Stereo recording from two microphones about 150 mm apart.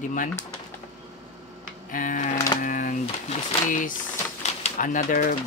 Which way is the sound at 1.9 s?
60° left (ahead or behind).